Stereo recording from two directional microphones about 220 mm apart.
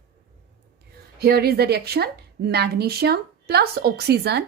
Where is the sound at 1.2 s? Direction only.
45° right (ahead or behind).